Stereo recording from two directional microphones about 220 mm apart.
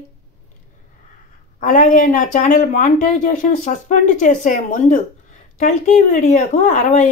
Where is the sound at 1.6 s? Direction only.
35° left (ahead or behind).